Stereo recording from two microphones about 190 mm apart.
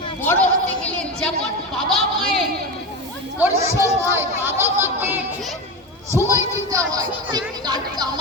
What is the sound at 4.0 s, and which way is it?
Speech, 15° right (ahead or behind).